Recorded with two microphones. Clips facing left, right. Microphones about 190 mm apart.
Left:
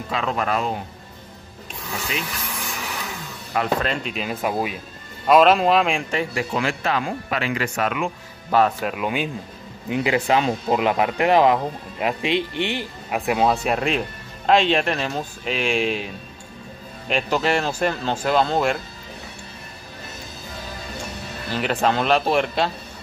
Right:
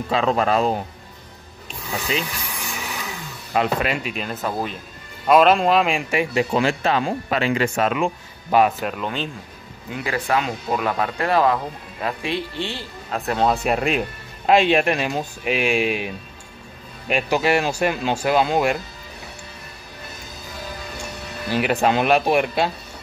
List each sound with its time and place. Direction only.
0.1 s speech: 30° right (ahead or behind)
2.3 s a sound: centre (ahead or behind)
3.8 s speech: 5° right (ahead or behind)
4.3 s speech: 10° left (ahead or behind)
5.2 s speech: centre (ahead or behind)
6.3 s speech: 25° right (ahead or behind)
8.5 s speech: 15° right (ahead or behind)
8.8 s speech: 10° left (ahead or behind)
9.8 s speech: 20° left (ahead or behind)
13.5 s speech: 5° right (ahead or behind)
17.1 s speech: 5° right (ahead or behind)
21.5 s speech: 10° right (ahead or behind)